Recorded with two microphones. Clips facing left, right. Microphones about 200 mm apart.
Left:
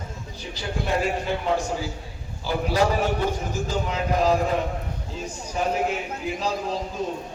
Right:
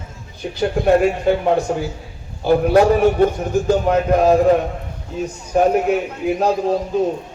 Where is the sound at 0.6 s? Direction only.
60° right (ahead or behind).